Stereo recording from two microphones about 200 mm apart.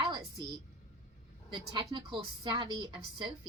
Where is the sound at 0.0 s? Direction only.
25° right (ahead or behind).